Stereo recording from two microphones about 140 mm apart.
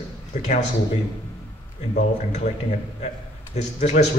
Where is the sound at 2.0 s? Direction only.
55° left (ahead or behind).